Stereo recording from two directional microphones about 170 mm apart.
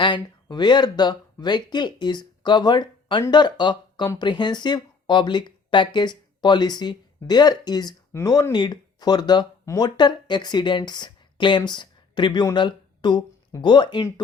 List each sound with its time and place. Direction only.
0.0 s speech: 25° left (ahead or behind)